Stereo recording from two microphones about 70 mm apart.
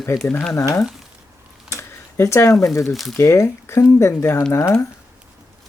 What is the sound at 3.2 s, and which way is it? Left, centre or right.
Speech, left.